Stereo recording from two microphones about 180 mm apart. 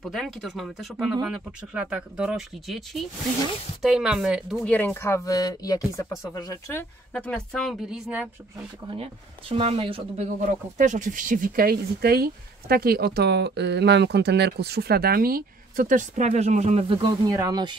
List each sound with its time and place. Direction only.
0.0 s a woman's voice: centre (ahead or behind)
8.9 s speech: 30° right (ahead or behind)
10.8 s speech: 45° right (ahead or behind); by 17.7 s 20° right (ahead or behind)